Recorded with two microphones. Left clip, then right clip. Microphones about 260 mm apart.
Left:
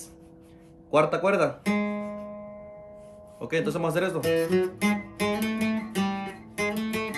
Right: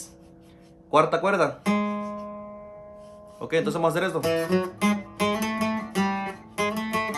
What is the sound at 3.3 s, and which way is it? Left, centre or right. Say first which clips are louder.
Music: right 3 dB; centre.